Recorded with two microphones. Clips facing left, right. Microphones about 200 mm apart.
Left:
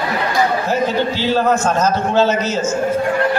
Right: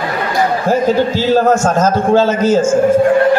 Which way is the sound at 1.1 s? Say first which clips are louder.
Right 5 dB; 45° right (ahead or behind).